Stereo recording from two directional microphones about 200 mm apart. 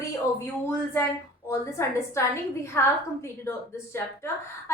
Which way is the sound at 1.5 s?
15° left (ahead or behind).